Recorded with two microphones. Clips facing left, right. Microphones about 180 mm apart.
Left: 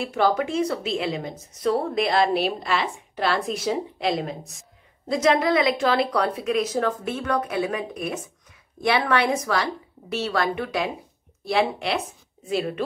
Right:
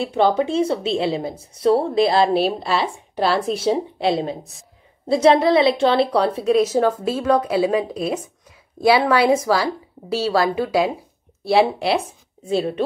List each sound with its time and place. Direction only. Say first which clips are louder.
0.0 s a woman's voice: right 4 dB; 25° right (ahead or behind)